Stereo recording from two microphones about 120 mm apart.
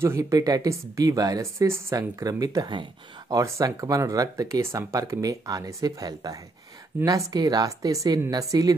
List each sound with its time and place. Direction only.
0.0 s speech: 25° right (ahead or behind)
3.3 s speech: 25° right (ahead or behind)